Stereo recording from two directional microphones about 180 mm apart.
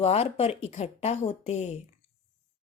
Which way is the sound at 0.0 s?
35° left (ahead or behind).